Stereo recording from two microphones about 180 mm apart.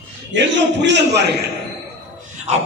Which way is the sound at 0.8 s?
70° right (ahead or behind).